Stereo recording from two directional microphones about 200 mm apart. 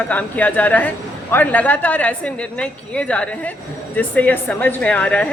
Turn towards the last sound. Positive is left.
turn(degrees=5)  # may be behind; listen again after turning